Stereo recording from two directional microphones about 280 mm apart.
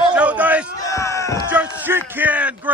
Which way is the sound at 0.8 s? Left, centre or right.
Centre.